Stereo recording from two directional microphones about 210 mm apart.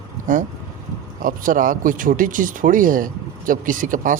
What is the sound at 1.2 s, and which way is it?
Speech, 40° right (ahead or behind).